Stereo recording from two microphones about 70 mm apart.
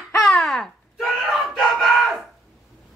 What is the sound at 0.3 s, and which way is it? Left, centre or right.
Babbling, centre.